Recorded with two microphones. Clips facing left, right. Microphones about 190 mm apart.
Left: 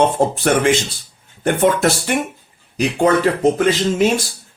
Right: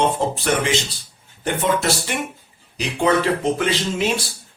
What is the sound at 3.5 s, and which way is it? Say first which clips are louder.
Speech: left 6 dB; 45° left (ahead or behind).